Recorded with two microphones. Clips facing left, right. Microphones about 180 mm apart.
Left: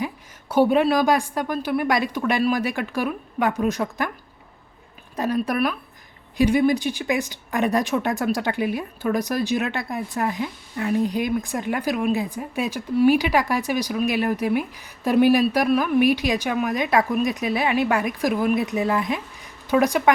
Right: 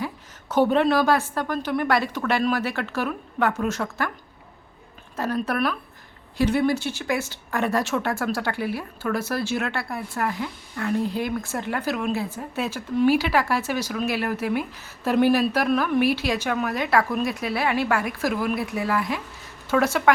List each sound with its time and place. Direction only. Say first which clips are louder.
0.0 s speech: left 2 dB; 10° left (ahead or behind)
5.1 s speech: left 2 dB; 15° left (ahead or behind)